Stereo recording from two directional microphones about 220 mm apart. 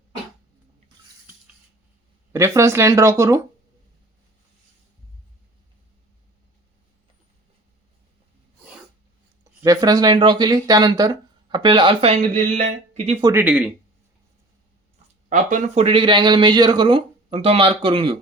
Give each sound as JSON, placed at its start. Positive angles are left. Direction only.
{"t": 2.3, "sound": "speech", "side_deg": -10}
{"t": 9.4, "sound": "speech", "side_deg": -15}
{"t": 13.2, "sound": "speech", "side_deg": -10}
{"t": 15.3, "sound": "speech", "side_deg": -35}